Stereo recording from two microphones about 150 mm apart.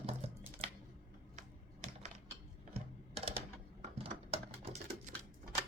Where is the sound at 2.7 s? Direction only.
40° right (ahead or behind).